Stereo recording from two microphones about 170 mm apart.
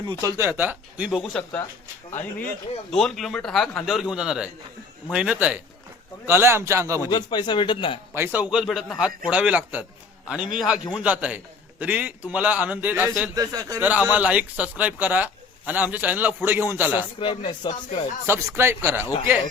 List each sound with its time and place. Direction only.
0.0 s a man's voice: 25° right (ahead or behind); by 1.6 s 5° left (ahead or behind)
2.9 s a man's voice: centre (ahead or behind); by 7.1 s 20° right (ahead or behind)
7.1 s speech: 25° left (ahead or behind)
8.1 s a man's voice: 10° right (ahead or behind)
13.3 s a man's voice: 20° right (ahead or behind)
13.8 s a man's voice: 10° right (ahead or behind)
17.2 s speech: 30° left (ahead or behind)
18.3 s a man's voice: 15° right (ahead or behind)